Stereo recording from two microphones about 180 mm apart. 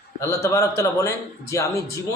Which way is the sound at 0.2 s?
15° left (ahead or behind).